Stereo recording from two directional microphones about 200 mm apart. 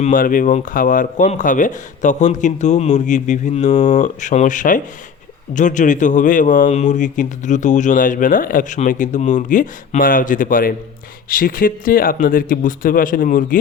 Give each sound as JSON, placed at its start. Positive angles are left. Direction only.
{"t": 0.0, "sound": "a man's voice", "side_deg": 40}